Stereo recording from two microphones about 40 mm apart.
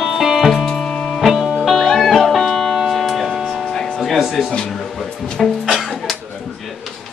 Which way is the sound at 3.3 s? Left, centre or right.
Centre.